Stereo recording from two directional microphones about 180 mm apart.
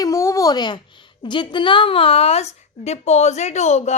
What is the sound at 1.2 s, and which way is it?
A woman's voice, 25° left (ahead or behind).